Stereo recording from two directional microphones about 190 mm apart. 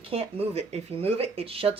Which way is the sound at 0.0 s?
30° right (ahead or behind).